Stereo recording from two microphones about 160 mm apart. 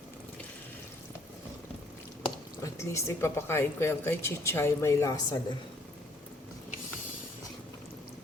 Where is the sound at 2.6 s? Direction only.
20° left (ahead or behind).